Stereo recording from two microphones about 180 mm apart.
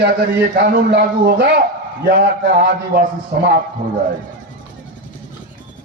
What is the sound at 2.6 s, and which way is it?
Speech, 55° right (ahead or behind).